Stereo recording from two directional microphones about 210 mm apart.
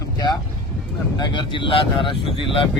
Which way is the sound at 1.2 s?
20° left (ahead or behind).